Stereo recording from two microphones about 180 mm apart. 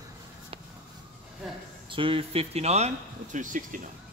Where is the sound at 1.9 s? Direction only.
30° right (ahead or behind); by 3.8 s 45° right (ahead or behind).